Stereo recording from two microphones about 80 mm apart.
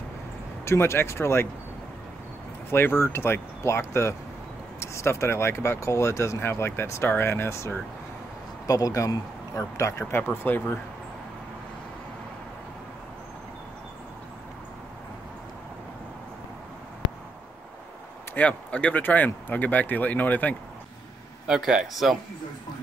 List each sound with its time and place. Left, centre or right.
0.7 s speech: left
2.7 s speech: left
8.6 s speech: left
18.3 s speech: centre
21.5 s speech: centre